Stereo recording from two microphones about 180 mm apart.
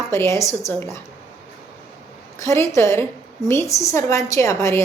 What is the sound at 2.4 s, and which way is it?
A woman's voice, 15° left (ahead or behind).